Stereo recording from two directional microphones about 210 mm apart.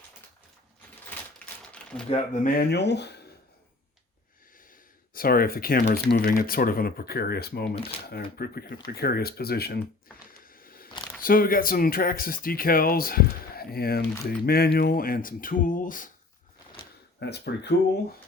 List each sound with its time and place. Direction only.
1.7 s a sound: 5° left (ahead or behind)
2.0 s speech: 35° left (ahead or behind); by 3.2 s 55° left (ahead or behind)
5.1 s speech: 45° left (ahead or behind)
10.4 s a sound: 40° left (ahead or behind)
11.2 s speech: 45° left (ahead or behind)
17.2 s speech: 50° left (ahead or behind)